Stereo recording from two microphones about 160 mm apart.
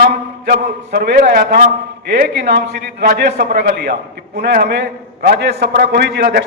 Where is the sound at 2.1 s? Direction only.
90° right.